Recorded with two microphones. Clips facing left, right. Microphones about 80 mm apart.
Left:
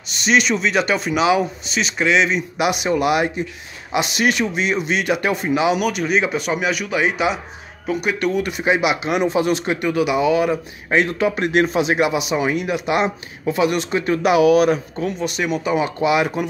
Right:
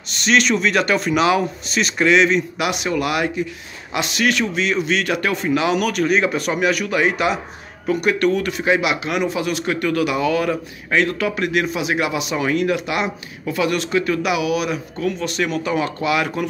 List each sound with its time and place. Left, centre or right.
0.2 s speech: centre
2.5 s speech: centre
10.9 s speech: left
15.2 s speech: centre